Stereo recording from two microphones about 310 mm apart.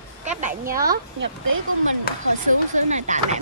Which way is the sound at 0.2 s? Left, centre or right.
Right.